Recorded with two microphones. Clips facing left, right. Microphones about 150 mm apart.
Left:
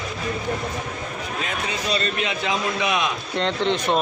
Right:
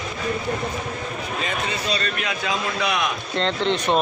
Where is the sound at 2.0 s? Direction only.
25° left (ahead or behind).